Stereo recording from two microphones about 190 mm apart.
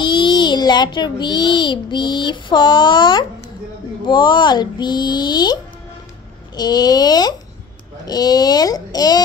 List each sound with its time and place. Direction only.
0.0 s a child's voice: 25° left (ahead or behind)